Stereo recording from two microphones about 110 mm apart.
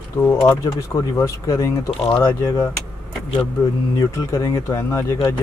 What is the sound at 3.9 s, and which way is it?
Speech, 25° left (ahead or behind).